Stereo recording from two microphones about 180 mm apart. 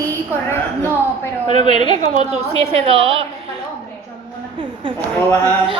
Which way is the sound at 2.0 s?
35° right (ahead or behind).